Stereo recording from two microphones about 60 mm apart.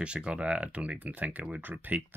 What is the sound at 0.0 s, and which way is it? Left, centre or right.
Speech, centre.